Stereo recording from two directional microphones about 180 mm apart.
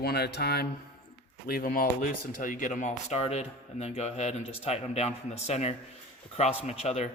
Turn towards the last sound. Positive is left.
turn(degrees=35)  # may be behind; listen again after turning